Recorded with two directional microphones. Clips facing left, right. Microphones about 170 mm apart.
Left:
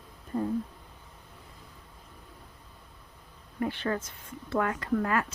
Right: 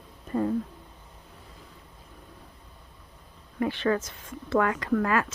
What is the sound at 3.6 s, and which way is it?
Speech, 90° right.